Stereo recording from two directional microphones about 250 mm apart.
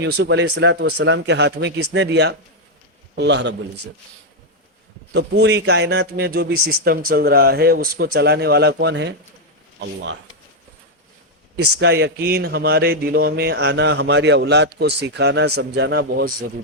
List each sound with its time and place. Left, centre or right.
0.0 s speech: right
5.1 s a man's voice: right
11.5 s a man's voice: right